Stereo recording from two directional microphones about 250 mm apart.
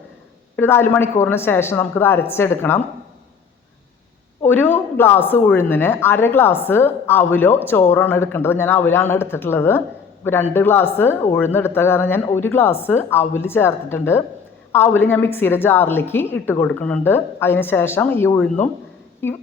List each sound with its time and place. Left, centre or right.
0.5 s speech: centre
4.4 s speech: centre